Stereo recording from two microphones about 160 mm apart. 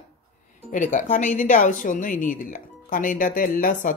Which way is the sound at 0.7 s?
55° left (ahead or behind).